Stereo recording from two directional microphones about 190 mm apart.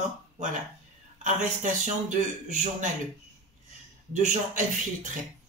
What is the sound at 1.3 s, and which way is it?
A man's voice, 40° right (ahead or behind).